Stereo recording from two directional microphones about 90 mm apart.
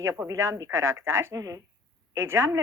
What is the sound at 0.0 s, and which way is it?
Speech, 40° right (ahead or behind).